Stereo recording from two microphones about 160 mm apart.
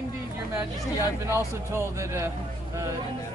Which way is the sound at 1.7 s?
15° right (ahead or behind).